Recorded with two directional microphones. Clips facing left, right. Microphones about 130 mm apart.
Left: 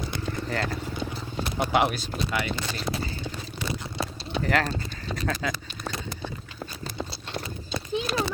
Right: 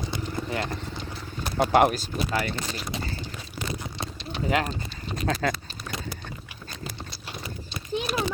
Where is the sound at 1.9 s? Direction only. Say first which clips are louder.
Right 2 dB; 40° right (ahead or behind).